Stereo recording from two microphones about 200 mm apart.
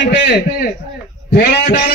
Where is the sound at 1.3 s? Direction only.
50° left (ahead or behind).